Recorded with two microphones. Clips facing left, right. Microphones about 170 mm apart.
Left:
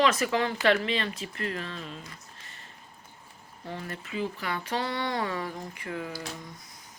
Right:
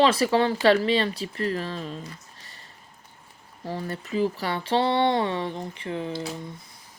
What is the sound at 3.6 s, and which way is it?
Speech, 35° right (ahead or behind).